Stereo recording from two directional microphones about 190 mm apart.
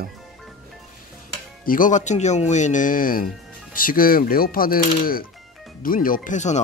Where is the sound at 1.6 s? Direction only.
45° left (ahead or behind).